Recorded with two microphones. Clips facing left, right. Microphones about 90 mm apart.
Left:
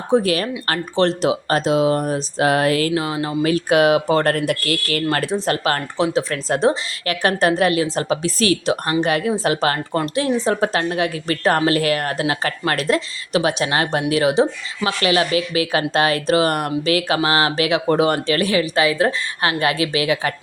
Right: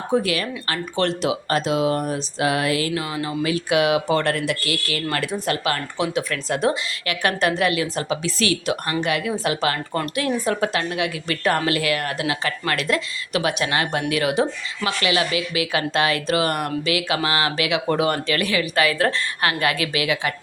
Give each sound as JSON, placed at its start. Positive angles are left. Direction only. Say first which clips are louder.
{"t": 0.1, "sound": "a woman's voice", "louder": "left 5 dB", "side_deg": 40}
{"t": 2.9, "sound": "a woman's voice", "louder": "left 4 dB", "side_deg": 30}
{"t": 10.0, "sound": "a woman's voice", "louder": "left 4 dB", "side_deg": 25}